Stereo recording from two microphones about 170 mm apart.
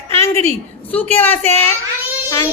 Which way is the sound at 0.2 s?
15° left (ahead or behind).